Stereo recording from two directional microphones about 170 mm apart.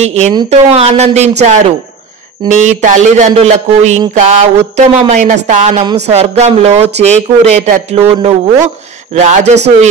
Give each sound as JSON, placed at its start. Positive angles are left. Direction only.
{"t": 0.0, "sound": "a man's voice", "side_deg": -40}